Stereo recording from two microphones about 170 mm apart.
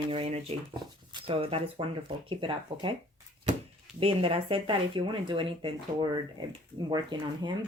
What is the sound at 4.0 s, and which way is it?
Speech, 35° right (ahead or behind).